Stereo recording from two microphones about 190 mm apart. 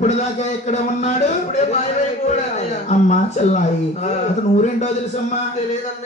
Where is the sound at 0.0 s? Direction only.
35° left (ahead or behind).